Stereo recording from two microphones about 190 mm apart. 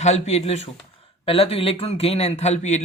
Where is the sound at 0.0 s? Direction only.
35° left (ahead or behind).